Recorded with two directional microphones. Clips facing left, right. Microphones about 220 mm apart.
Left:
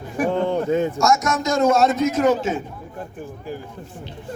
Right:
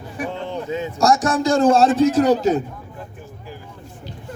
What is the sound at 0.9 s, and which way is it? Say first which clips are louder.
A man's voice: right 2 dB; 35° right (ahead or behind).